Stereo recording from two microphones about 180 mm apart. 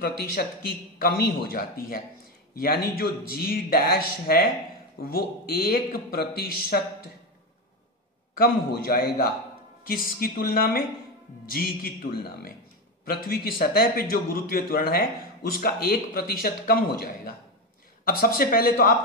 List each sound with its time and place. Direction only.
0.4 s a man's voice: 60° left (ahead or behind)
8.4 s a man's voice: 55° left (ahead or behind)